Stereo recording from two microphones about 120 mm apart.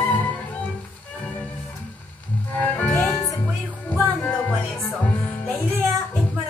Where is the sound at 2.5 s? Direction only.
15° left (ahead or behind).